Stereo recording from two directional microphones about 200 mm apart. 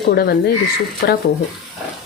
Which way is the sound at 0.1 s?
55° left (ahead or behind).